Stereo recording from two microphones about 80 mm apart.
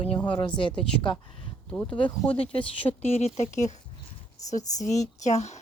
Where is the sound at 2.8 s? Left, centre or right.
Left.